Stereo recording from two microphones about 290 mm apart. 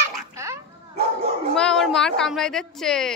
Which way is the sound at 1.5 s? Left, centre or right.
Centre.